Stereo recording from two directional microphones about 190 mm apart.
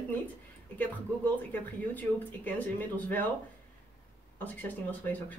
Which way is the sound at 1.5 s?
10° left (ahead or behind).